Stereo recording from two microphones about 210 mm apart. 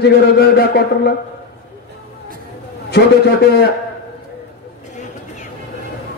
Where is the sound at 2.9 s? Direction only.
50° left (ahead or behind).